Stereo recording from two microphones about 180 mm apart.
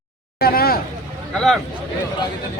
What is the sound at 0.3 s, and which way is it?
Speech, 60° left (ahead or behind).